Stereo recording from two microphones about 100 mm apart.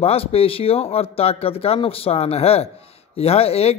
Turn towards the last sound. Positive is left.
turn(degrees=90)